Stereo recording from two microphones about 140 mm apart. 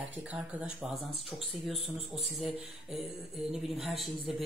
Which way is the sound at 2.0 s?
50° right (ahead or behind).